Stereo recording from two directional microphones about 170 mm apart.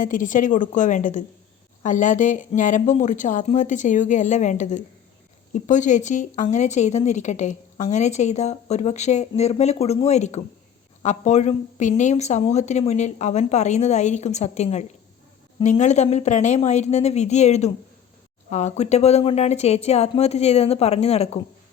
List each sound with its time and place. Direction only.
0.0 s a woman's voice: 50° left (ahead or behind)